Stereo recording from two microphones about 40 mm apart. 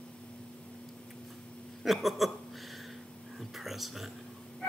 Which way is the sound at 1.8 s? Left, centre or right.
Centre.